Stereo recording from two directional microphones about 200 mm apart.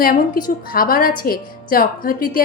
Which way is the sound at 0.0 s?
45° left (ahead or behind).